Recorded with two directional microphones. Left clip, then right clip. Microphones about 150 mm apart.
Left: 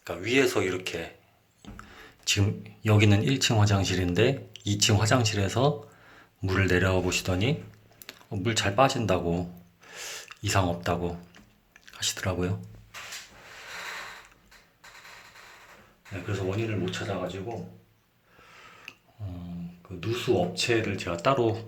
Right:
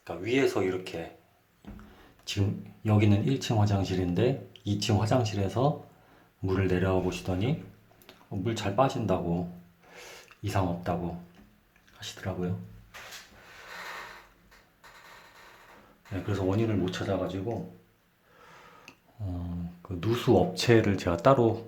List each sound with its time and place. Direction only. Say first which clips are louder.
0.0 s speech: left 3 dB; 5° left (ahead or behind)
11.9 s speech: left 8 dB; 20° left (ahead or behind)
16.3 s speech: right 2 dB; 35° right (ahead or behind)
18.5 s a sound: left 6 dB; 20° right (ahead or behind)
20.0 s speech: right 2 dB; 45° right (ahead or behind); by 21.7 s 15° right (ahead or behind)